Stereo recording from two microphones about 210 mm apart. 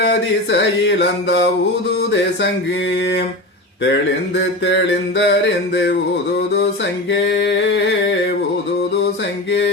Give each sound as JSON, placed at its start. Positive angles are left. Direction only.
{"t": 0.0, "sound": "mantra", "side_deg": 55}
{"t": 4.4, "sound": "mantra", "side_deg": 60}
{"t": 7.1, "sound": "mantra", "side_deg": 55}